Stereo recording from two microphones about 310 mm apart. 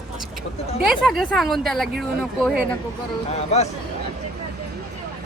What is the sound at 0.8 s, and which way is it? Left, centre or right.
Speech, centre.